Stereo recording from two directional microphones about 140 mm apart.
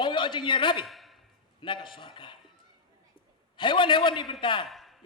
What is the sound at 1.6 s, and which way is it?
Speech, 35° left (ahead or behind).